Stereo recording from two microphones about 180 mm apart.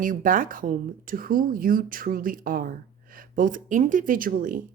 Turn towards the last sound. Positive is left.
turn(degrees=-50)  # may be behind; listen again after turning